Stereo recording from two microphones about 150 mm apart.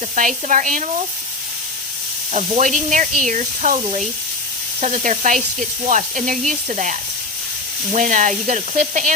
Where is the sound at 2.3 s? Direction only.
50° right (ahead or behind).